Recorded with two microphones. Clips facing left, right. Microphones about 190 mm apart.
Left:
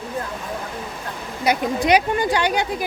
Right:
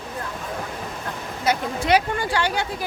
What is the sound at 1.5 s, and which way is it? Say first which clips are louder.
Speech: left 3 dB; 15° left (ahead or behind).